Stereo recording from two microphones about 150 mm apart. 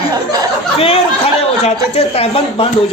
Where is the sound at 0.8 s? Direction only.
40° left (ahead or behind).